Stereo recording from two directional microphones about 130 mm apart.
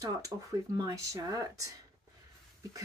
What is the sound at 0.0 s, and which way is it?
Speech, 25° right (ahead or behind).